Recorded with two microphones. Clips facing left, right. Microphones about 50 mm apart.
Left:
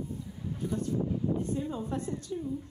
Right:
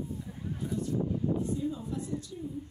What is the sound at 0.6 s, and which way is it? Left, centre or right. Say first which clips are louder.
Speech: left 2 dB; right.